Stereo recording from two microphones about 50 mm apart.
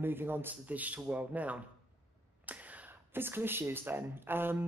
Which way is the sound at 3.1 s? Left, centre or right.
Right.